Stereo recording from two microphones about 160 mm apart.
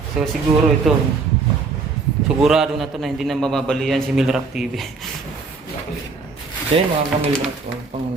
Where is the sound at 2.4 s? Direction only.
Centre (ahead or behind).